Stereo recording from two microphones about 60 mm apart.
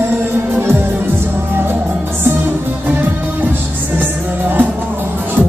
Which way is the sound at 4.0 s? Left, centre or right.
Right.